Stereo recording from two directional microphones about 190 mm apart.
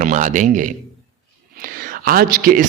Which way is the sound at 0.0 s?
40° right (ahead or behind).